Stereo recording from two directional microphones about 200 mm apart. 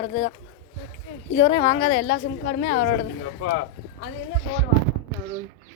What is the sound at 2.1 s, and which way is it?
Speech, 55° left (ahead or behind).